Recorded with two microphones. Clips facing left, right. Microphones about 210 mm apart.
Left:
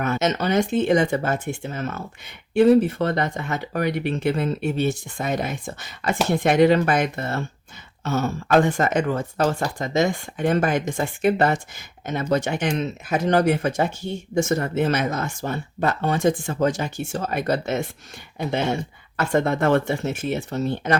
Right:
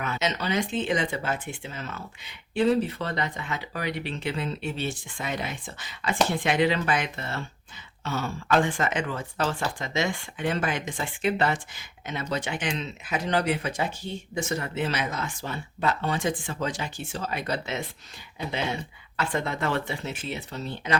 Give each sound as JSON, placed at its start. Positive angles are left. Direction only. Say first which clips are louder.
{"t": 0.0, "sound": "speech", "louder": "left 7 dB", "side_deg": 45}